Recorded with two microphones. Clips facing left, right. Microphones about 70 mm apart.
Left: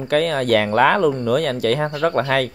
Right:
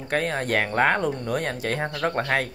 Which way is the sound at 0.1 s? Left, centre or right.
Left.